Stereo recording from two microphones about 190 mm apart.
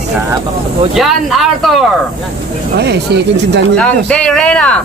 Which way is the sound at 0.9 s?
Centre (ahead or behind).